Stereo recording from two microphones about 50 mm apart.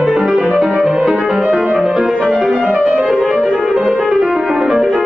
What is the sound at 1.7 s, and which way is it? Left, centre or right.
Music, right.